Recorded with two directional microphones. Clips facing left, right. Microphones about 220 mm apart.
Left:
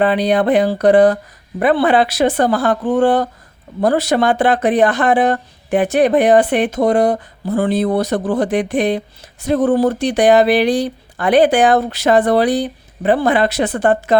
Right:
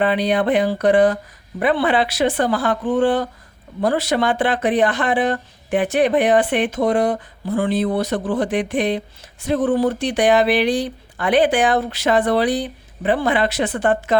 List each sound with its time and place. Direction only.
0.0 s speech: 40° left (ahead or behind)